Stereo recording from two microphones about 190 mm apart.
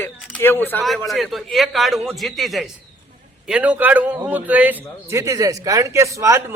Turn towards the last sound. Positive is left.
turn(degrees=-15)  # may be behind; listen again after turning